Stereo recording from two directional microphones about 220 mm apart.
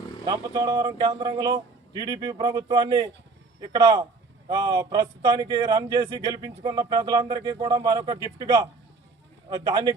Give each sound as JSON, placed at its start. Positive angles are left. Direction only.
{"t": 0.3, "sound": "a man's voice", "side_deg": -15}
{"t": 9.6, "sound": "a man's voice", "side_deg": -20}